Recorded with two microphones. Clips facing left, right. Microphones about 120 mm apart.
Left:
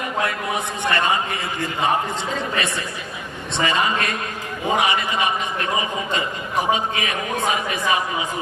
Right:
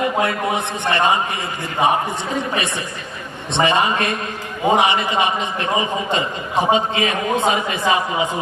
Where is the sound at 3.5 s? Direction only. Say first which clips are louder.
Right 4 dB; 25° right (ahead or behind).